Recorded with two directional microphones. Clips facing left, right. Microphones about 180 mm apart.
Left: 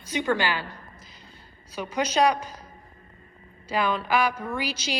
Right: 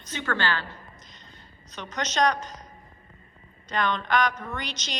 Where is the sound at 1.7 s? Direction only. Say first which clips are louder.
Left 4 dB; 10° left (ahead or behind).